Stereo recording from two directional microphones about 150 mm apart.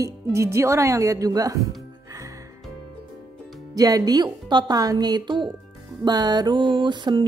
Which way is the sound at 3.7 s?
25° right (ahead or behind).